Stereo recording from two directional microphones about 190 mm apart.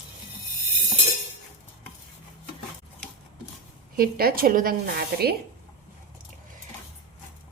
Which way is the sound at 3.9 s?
50° right (ahead or behind).